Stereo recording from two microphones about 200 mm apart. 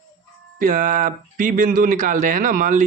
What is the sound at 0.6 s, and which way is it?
Speech, 40° right (ahead or behind).